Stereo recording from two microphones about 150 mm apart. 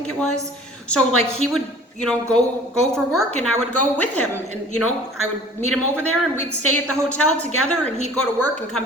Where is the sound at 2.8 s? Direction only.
5° left (ahead or behind).